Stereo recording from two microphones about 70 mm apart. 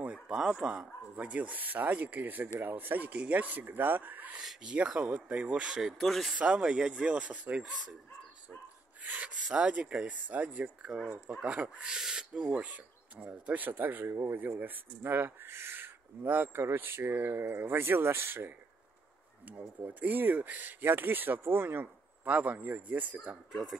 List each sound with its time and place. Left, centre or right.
0.3 s speech: centre; by 4.4 s right
4.4 s speech: centre
6.3 s speech: centre
7.6 s speech: centre
9.0 s speech: right
19.4 s speech: right